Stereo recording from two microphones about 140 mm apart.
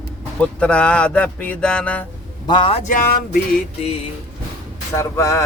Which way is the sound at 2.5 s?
35° left (ahead or behind).